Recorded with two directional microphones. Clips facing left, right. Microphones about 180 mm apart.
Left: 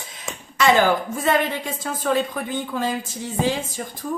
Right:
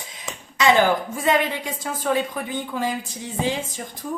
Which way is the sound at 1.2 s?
15° right (ahead or behind).